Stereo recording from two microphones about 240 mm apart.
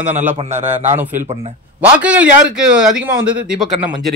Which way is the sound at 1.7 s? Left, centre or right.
Centre.